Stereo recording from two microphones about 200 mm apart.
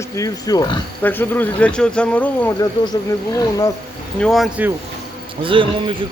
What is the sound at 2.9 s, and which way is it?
Speech, 20° left (ahead or behind).